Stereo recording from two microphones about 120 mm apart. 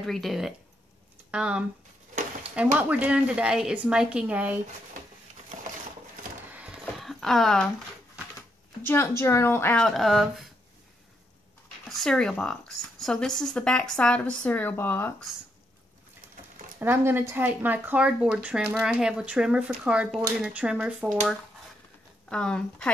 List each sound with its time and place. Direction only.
0.0 s speech: centre (ahead or behind)
2.8 s speech: 10° right (ahead or behind)
7.0 s a sound: centre (ahead or behind)
8.8 s speech: 25° left (ahead or behind)
9.8 s speech: centre (ahead or behind)
11.9 s speech: 5° left (ahead or behind)
16.8 s speech: 20° right (ahead or behind)
22.3 s speech: 5° left (ahead or behind)